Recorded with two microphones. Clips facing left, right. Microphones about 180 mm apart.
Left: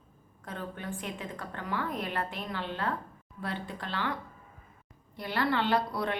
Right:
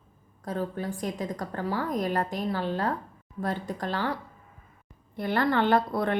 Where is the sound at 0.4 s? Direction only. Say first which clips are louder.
Right 7 dB; 35° right (ahead or behind).